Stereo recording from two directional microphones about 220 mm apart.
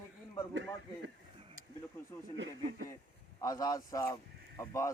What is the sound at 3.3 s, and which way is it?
Speech, 15° left (ahead or behind).